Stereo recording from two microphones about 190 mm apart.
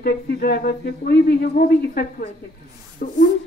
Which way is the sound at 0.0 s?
55° left (ahead or behind).